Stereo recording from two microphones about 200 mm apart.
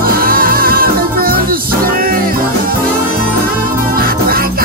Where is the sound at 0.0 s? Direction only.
45° right (ahead or behind).